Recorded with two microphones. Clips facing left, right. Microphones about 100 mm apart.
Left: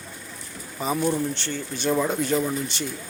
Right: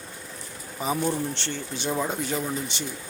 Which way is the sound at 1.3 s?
25° right (ahead or behind).